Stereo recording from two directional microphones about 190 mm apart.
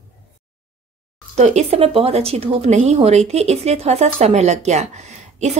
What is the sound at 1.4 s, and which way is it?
A woman's voice, 35° right (ahead or behind).